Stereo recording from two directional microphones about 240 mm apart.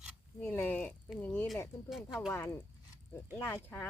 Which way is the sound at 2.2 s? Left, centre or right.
Centre.